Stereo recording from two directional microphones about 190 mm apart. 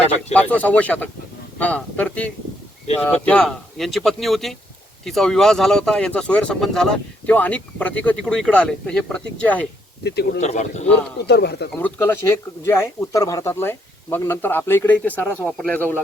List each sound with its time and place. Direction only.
0.3 s speech: 10° left (ahead or behind)
10.0 s speech: 60° left (ahead or behind)
10.4 s a man's voice: 35° left (ahead or behind)
11.3 s speech: 60° left (ahead or behind)
11.7 s speech: 10° left (ahead or behind)